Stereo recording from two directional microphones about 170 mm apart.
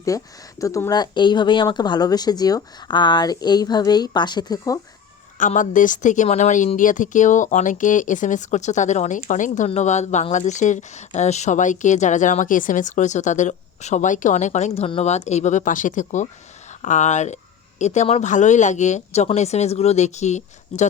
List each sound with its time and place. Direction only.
0.1 s speech: 20° left (ahead or behind)
5.4 s speech: 50° left (ahead or behind)